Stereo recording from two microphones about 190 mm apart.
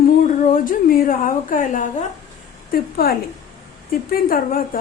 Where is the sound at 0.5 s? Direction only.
45° left (ahead or behind).